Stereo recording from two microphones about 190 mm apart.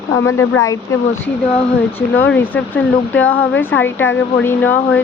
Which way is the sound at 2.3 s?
10° left (ahead or behind).